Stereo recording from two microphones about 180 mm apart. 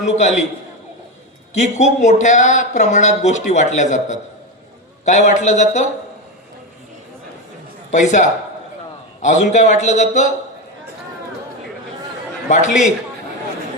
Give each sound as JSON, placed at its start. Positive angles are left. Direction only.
{"t": 0.0, "sound": "speech", "side_deg": 40}
{"t": 1.5, "sound": "speech", "side_deg": 40}
{"t": 7.9, "sound": "a man's voice", "side_deg": 45}
{"t": 12.5, "sound": "a man's voice", "side_deg": 40}